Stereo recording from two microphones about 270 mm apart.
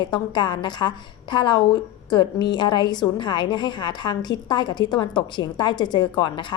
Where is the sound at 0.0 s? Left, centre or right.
Centre.